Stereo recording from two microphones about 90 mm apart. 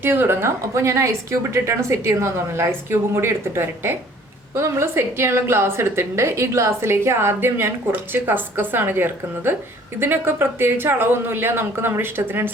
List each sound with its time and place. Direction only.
0.0 s a woman's voice: 25° right (ahead or behind)